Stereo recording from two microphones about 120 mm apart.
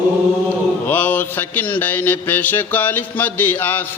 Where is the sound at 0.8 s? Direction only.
15° left (ahead or behind).